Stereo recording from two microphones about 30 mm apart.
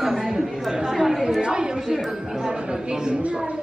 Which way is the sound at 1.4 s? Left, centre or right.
Right.